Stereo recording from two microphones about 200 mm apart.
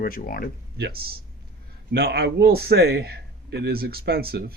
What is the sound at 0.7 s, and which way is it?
Speech, 55° right (ahead or behind).